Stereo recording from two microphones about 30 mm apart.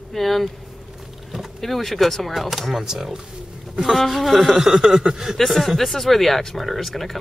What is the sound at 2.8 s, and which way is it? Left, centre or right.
Speech, centre.